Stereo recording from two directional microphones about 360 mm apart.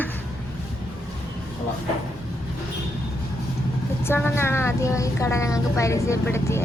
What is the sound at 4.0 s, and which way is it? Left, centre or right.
A woman's voice, centre.